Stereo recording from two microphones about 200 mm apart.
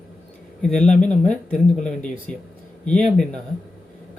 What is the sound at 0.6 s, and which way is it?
Speech, 5° left (ahead or behind).